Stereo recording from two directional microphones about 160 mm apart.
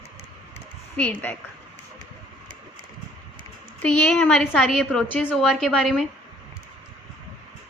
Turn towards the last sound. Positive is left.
turn(degrees=0)  # may be behind; listen again after turning